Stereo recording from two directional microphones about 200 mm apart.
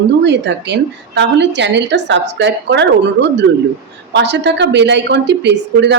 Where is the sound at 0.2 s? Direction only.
60° right (ahead or behind).